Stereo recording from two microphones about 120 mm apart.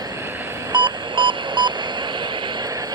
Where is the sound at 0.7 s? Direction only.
40° right (ahead or behind).